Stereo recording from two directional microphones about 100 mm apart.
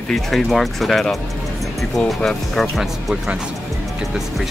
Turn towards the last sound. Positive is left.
turn(degrees=0)  # may be behind; listen again after turning